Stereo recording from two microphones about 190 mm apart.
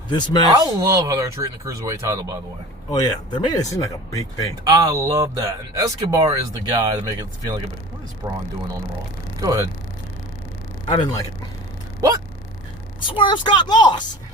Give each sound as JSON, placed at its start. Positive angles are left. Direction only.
{"t": 0.1, "sound": "speech", "side_deg": 25}
{"t": 0.6, "sound": "speech", "side_deg": -15}
{"t": 2.9, "sound": "speech", "side_deg": 20}
{"t": 4.6, "sound": "speech", "side_deg": -20}
{"t": 8.2, "sound": "speech", "side_deg": -20}
{"t": 9.4, "sound": "speech", "side_deg": -15}
{"t": 10.8, "sound": "speech", "side_deg": 25}
{"t": 13.1, "sound": "speech", "side_deg": 25}